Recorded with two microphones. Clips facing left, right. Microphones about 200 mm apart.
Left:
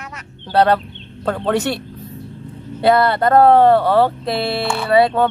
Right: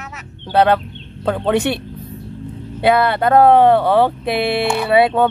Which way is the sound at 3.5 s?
15° right (ahead or behind).